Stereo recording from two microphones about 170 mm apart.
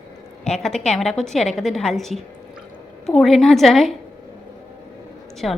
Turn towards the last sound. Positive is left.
turn(degrees=0)  # may be behind; listen again after turning